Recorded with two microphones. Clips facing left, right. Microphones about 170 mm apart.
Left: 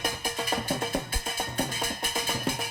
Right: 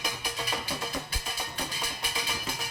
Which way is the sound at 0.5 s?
50° left (ahead or behind).